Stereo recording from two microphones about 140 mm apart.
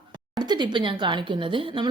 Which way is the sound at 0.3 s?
30° right (ahead or behind).